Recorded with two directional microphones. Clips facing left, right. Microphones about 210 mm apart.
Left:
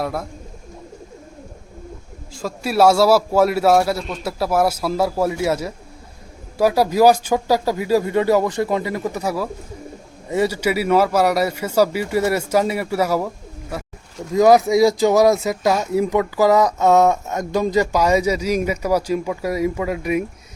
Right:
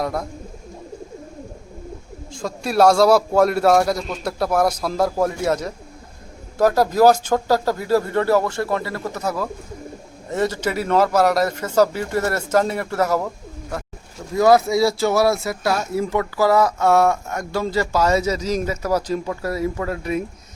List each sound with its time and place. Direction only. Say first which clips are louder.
0.0 s speech: even; 5° left (ahead or behind)
2.3 s a man's voice: even; 5° left (ahead or behind)
14.3 s speech: left 2 dB; 15° left (ahead or behind)